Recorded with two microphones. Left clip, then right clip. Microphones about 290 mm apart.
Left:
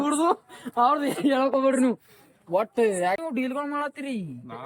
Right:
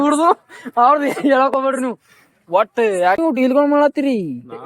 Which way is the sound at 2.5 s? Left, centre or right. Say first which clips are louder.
Right 8 dB; centre.